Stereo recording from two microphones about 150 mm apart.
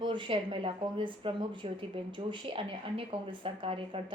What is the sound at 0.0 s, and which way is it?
Speech, 30° right (ahead or behind).